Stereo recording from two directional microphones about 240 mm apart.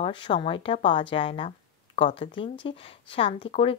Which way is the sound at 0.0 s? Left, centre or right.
Centre.